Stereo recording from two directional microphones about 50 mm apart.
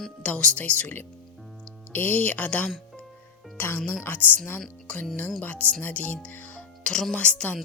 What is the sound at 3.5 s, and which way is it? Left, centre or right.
Speech, left.